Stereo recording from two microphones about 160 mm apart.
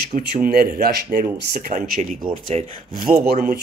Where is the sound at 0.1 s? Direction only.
60° right (ahead or behind).